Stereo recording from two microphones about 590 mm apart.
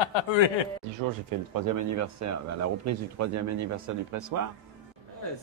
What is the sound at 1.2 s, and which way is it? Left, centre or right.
Speech, right.